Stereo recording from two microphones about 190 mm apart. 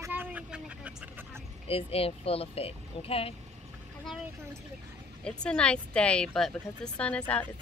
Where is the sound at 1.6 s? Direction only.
30° left (ahead or behind).